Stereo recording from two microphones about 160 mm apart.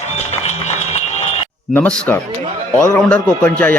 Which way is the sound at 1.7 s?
10° left (ahead or behind).